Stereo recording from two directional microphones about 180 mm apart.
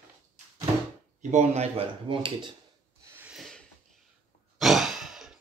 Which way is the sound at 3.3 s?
Centre (ahead or behind).